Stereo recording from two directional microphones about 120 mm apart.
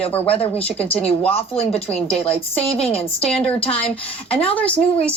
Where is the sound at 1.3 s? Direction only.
55° left (ahead or behind).